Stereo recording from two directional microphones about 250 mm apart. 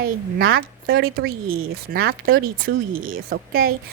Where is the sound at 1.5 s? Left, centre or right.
Right.